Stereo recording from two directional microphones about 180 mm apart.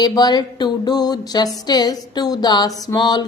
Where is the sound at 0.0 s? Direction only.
25° left (ahead or behind).